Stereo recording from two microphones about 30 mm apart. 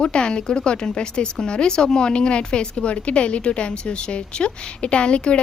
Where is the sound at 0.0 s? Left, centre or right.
Left.